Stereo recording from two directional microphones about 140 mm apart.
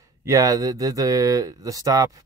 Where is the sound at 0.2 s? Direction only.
25° right (ahead or behind).